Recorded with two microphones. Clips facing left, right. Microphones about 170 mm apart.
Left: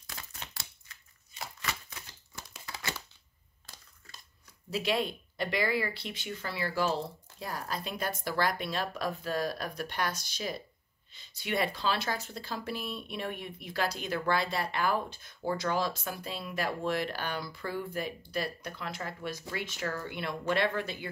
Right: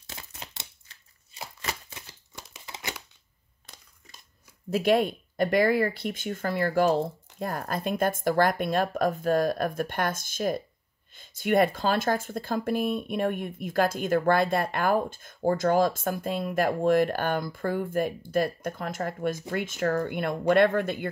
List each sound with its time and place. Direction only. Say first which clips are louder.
0.0 s a sound: right 2 dB; 25° right (ahead or behind)
1.4 s shuffling cards: right 3 dB; 30° right (ahead or behind)
2.3 s crumpling: right 1 dB; 20° right (ahead or behind)
3.6 s crushing: right 1 dB; 20° right (ahead or behind)
4.6 s speech: right 8 dB; 50° right (ahead or behind)